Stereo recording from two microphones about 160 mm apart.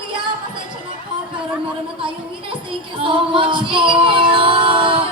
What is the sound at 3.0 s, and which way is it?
Music, 30° right (ahead or behind).